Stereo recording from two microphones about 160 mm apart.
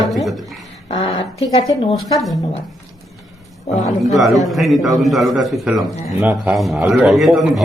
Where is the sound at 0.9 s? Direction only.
40° left (ahead or behind).